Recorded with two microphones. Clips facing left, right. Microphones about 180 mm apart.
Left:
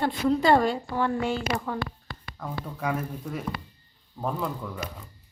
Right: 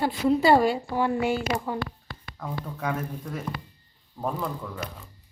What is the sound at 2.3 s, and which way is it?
Speech, 5° left (ahead or behind).